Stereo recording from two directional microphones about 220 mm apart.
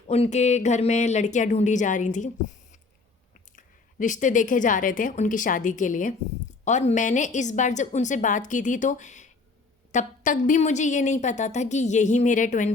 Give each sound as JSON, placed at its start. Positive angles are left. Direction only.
{"t": 0.1, "sound": "a woman's voice", "side_deg": 30}
{"t": 3.5, "sound": "a woman's voice", "side_deg": 35}